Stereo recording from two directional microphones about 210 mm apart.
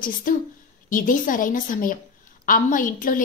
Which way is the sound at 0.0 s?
40° left (ahead or behind).